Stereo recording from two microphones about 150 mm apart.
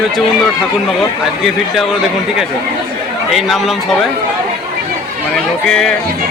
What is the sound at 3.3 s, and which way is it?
Speech, centre (ahead or behind).